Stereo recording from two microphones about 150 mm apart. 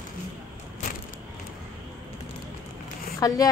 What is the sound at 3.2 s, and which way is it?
Speech, 25° left (ahead or behind).